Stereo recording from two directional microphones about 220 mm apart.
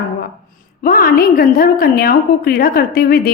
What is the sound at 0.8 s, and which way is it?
A woman's voice, 40° left (ahead or behind).